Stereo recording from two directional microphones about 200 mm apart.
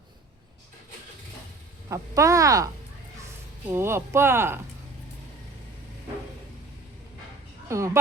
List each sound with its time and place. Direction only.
1.9 s speech: 15° right (ahead or behind)
3.7 s speech: 10° right (ahead or behind)
7.7 s speech: 15° right (ahead or behind)